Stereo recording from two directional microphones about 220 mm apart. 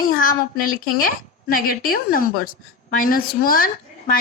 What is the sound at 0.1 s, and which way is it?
A woman's voice, 40° left (ahead or behind).